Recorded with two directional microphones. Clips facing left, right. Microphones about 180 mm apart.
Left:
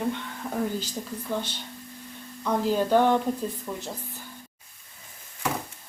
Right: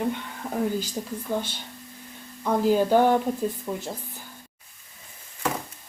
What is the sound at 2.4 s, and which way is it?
A woman's voice, 10° right (ahead or behind).